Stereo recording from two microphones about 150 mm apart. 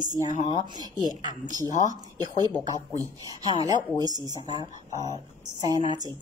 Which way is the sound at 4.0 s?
25° right (ahead or behind).